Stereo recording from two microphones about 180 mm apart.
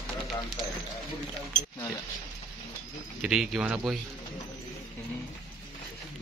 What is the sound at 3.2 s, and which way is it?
Speech, 5° right (ahead or behind).